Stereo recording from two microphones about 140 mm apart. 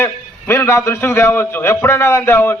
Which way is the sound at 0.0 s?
15° left (ahead or behind).